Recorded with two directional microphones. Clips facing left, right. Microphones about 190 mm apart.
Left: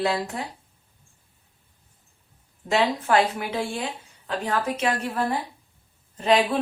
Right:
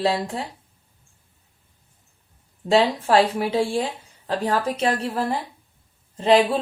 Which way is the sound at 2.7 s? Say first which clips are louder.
Right 4 dB; 30° right (ahead or behind).